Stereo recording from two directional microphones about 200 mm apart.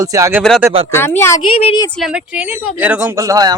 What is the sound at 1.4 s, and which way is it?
Speech, 30° left (ahead or behind).